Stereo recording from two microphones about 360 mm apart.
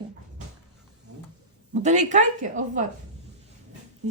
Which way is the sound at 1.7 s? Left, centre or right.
Centre.